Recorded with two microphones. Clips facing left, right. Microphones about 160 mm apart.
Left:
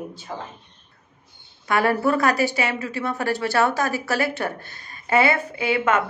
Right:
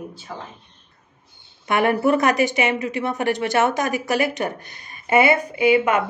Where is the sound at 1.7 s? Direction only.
20° right (ahead or behind).